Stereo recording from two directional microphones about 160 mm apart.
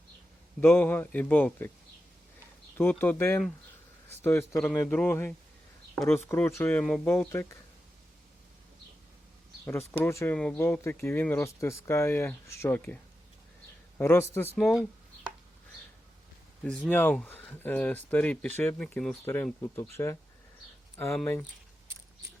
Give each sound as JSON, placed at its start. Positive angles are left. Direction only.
{"t": 0.6, "sound": "speech", "side_deg": 10}
{"t": 2.7, "sound": "speech", "side_deg": 10}
{"t": 9.6, "sound": "speech", "side_deg": 15}
{"t": 14.0, "sound": "speech", "side_deg": 15}
{"t": 14.6, "sound": "a sound", "side_deg": 0}
{"t": 16.6, "sound": "speech", "side_deg": 5}